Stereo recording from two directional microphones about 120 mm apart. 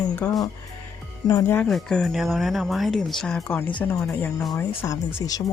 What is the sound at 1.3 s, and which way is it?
Speech, 30° left (ahead or behind).